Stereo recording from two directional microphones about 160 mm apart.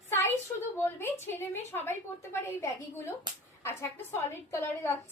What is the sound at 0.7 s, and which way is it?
A woman's voice, 15° left (ahead or behind).